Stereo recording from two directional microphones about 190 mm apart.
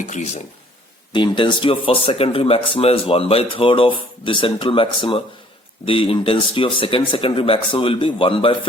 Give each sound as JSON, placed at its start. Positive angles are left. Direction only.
{"t": 0.0, "sound": "speech", "side_deg": 40}
{"t": 1.1, "sound": "speech", "side_deg": 25}